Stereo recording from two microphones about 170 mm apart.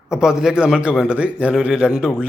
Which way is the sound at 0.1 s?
5° right (ahead or behind).